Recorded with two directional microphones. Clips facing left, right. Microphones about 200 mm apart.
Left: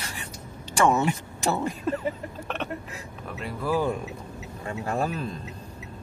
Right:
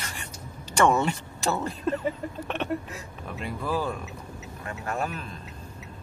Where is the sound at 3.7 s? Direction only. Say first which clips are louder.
Left 4 dB; 20° left (ahead or behind).